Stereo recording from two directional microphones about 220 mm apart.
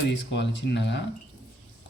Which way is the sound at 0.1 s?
55° left (ahead or behind).